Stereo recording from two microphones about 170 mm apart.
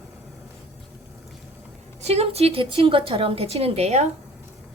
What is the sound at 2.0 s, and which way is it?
A woman's voice, 40° right (ahead or behind).